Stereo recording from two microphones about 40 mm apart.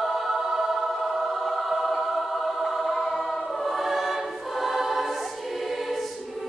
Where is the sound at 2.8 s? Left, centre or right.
Centre.